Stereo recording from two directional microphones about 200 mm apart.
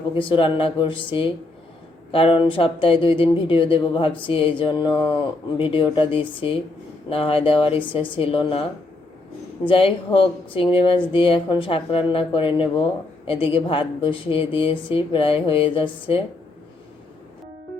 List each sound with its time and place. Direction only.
0.3 s speech: 25° left (ahead or behind)
9.6 s speech: 25° left (ahead or behind)